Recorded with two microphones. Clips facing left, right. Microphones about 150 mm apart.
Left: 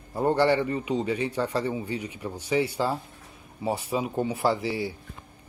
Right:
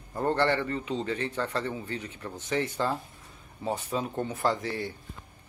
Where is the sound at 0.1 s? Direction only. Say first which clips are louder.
Left 4 dB; 10° left (ahead or behind).